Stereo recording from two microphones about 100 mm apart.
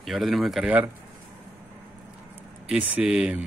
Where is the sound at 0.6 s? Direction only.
15° right (ahead or behind).